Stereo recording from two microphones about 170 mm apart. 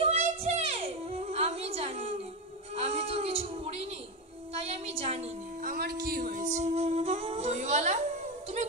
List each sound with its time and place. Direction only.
0.0 s music: 40° right (ahead or behind)
2.7 s a sound: 35° right (ahead or behind)
5.7 s music: 70° right (ahead or behind); by 8.0 s 40° right (ahead or behind)